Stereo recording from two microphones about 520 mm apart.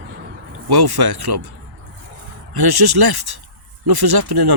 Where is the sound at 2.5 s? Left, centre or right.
Right.